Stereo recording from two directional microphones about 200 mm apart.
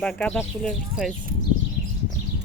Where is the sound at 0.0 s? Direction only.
5° left (ahead or behind).